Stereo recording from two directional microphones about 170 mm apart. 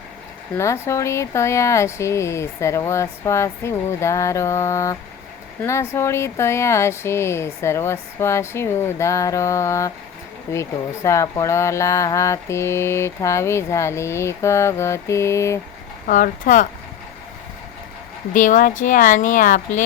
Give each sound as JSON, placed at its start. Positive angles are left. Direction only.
{"t": 0.5, "sound": "speech", "side_deg": 15}
{"t": 16.0, "sound": "speech", "side_deg": 50}
{"t": 18.3, "sound": "speech", "side_deg": 50}